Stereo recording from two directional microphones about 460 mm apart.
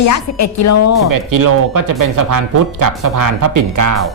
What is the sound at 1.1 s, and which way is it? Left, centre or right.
Speech, right.